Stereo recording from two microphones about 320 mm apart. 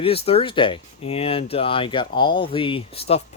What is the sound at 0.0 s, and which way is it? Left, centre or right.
Speech, centre.